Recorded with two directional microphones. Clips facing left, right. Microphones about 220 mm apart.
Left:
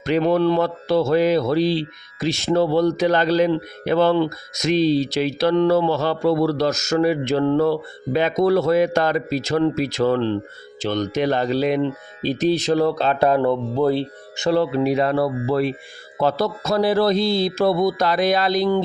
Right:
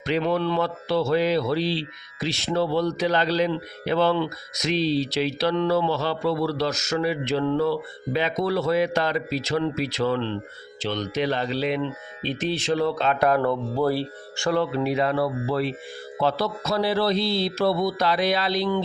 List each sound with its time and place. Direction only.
0.0 s speech: 45° left (ahead or behind); by 14.6 s 20° left (ahead or behind)
14.6 s speech: 40° left (ahead or behind)